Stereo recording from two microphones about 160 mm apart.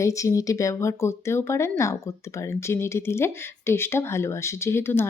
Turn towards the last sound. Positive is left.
turn(degrees=15)  # may be behind; listen again after turning